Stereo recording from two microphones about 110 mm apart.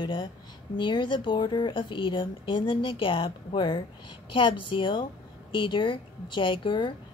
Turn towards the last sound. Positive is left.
turn(degrees=45)  # may be behind; listen again after turning